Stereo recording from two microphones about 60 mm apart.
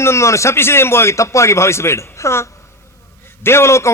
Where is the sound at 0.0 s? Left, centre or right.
Left.